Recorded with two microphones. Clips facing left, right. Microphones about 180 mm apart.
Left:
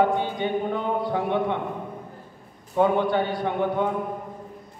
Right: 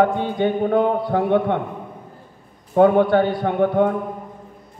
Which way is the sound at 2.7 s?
55° right (ahead or behind).